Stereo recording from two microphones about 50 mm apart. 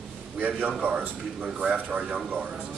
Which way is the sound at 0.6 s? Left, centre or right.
Right.